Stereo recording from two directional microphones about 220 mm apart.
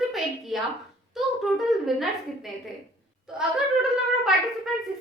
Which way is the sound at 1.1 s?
Centre (ahead or behind).